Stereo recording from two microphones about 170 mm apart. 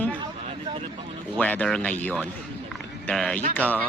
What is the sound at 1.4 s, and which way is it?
Speech, 5° left (ahead or behind).